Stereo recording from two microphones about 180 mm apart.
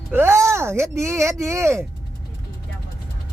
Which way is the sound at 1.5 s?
15° right (ahead or behind).